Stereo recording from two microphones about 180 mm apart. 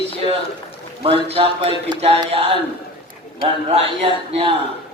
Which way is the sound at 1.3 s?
30° right (ahead or behind).